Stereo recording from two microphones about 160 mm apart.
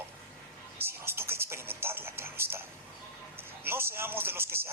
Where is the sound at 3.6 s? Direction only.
15° right (ahead or behind).